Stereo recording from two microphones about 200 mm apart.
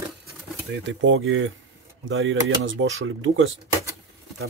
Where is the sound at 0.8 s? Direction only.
75° right (ahead or behind).